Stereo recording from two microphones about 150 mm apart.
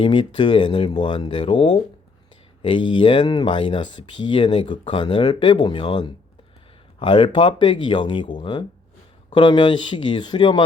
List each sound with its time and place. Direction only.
0.0 s speech: 30° left (ahead or behind)